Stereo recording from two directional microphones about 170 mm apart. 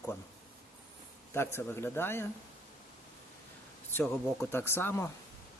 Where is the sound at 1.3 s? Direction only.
15° left (ahead or behind).